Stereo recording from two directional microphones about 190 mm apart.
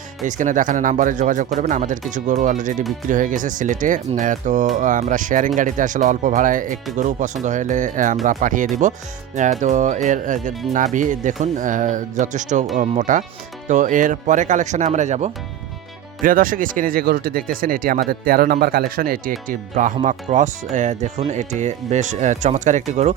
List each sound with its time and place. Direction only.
0.3 s speech: 40° right (ahead or behind)